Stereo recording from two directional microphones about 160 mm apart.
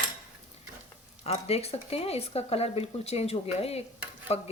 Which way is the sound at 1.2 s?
40° left (ahead or behind).